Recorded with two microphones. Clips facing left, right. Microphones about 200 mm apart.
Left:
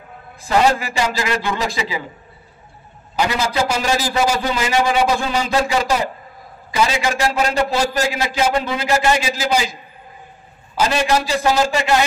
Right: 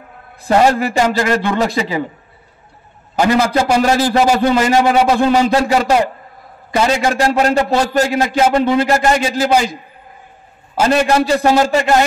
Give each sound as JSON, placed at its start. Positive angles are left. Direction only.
{"t": 0.7, "sound": "a man's voice", "side_deg": -50}
{"t": 3.2, "sound": "a man's voice", "side_deg": -55}